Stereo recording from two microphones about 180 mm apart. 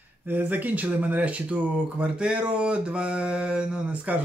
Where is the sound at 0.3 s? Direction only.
10° right (ahead or behind).